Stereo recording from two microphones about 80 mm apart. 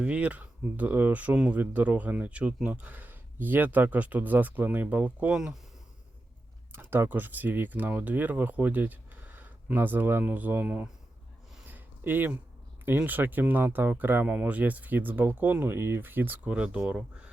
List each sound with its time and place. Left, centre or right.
0.0 s speech: centre
6.7 s speech: right
11.6 s a sound: right
13.1 s speech: right